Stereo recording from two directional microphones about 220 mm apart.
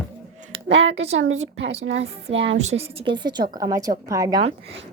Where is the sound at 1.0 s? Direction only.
30° right (ahead or behind).